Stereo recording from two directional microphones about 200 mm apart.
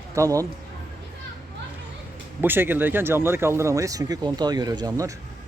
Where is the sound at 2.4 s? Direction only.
10° right (ahead or behind).